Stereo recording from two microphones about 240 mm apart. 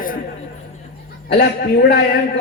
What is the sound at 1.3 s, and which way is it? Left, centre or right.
Speech, left.